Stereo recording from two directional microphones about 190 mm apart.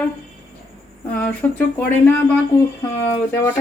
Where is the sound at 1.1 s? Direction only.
10° left (ahead or behind).